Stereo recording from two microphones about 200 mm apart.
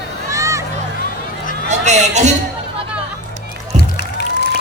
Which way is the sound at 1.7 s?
35° right (ahead or behind).